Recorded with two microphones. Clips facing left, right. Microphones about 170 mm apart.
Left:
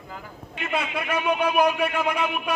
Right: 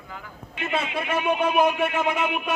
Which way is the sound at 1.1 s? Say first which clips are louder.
Even; 25° right (ahead or behind).